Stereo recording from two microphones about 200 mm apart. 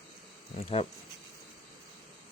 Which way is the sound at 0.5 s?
30° left (ahead or behind).